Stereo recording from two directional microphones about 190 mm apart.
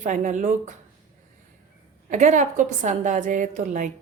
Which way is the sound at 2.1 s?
40° right (ahead or behind).